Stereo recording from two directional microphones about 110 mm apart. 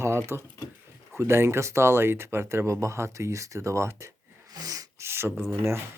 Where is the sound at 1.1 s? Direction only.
25° right (ahead or behind).